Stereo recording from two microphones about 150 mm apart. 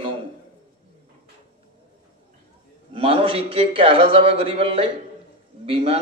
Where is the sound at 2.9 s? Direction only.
35° right (ahead or behind).